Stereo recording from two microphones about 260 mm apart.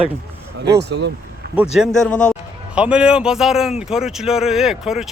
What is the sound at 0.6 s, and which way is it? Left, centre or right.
Speech, right.